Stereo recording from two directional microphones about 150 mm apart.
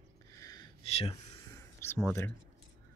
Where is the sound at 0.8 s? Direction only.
40° left (ahead or behind).